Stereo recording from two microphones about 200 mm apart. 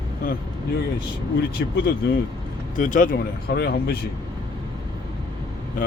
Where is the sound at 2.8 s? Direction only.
40° left (ahead or behind).